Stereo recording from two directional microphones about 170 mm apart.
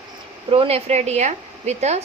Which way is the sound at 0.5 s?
35° right (ahead or behind).